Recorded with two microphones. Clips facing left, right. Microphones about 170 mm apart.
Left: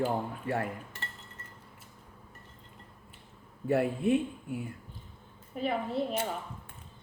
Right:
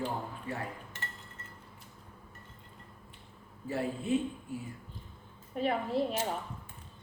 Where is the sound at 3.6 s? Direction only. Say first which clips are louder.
Left 6 dB; 60° left (ahead or behind).